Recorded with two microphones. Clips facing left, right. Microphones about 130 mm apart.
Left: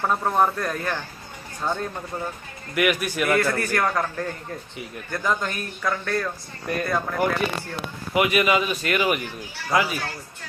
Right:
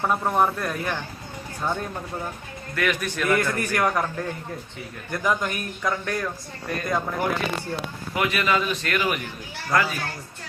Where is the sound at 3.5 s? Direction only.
15° right (ahead or behind).